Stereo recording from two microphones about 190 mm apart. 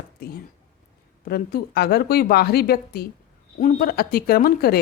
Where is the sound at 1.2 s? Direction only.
50° left (ahead or behind).